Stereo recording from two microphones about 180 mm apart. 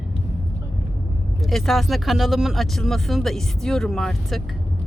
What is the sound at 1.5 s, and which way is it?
Speech, centre (ahead or behind).